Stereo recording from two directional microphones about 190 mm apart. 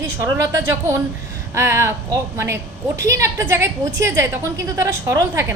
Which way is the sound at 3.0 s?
15° right (ahead or behind).